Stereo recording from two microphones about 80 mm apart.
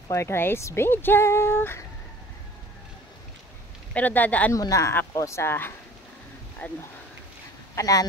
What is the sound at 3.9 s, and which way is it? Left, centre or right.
Speech, left.